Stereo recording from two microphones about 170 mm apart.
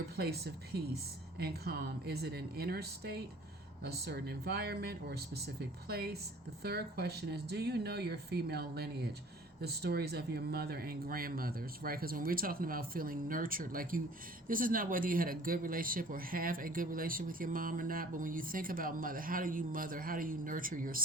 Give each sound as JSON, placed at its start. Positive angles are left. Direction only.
{"t": 0.2, "sound": "speech", "side_deg": -70}